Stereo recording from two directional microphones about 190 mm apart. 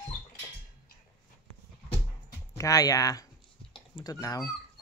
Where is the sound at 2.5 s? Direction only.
15° left (ahead or behind).